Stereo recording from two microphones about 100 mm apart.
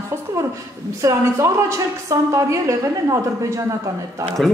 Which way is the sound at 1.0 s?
30° right (ahead or behind).